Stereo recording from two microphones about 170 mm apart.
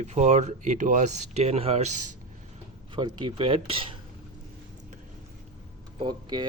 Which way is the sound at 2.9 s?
25° right (ahead or behind).